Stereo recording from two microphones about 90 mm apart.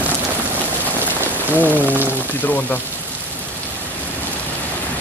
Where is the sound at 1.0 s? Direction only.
20° left (ahead or behind).